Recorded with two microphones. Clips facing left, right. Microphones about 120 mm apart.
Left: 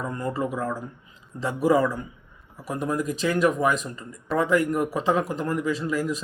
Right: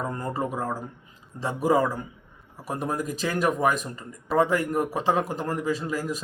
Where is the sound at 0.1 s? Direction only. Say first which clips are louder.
Left 2 dB; 35° right (ahead or behind).